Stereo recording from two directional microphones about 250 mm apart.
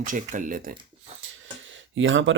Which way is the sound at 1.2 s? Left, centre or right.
Right.